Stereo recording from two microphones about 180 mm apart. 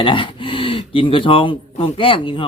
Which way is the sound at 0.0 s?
30° left (ahead or behind).